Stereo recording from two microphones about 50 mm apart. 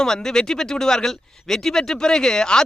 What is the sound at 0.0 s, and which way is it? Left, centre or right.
Speech, centre.